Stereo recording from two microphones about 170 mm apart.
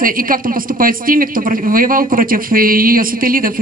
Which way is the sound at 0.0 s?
55° right (ahead or behind).